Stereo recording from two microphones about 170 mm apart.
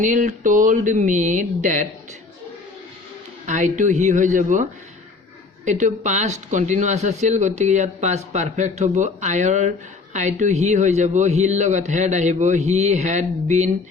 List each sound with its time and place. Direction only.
0.0 s speech: 45° right (ahead or behind)
3.4 s speech: 45° right (ahead or behind)
5.6 s speech: 45° right (ahead or behind)